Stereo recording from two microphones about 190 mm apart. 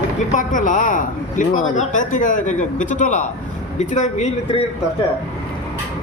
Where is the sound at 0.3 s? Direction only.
45° left (ahead or behind).